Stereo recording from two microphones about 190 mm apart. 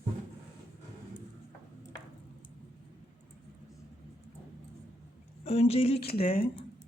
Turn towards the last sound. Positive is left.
turn(degrees=30)  # may be behind; listen again after turning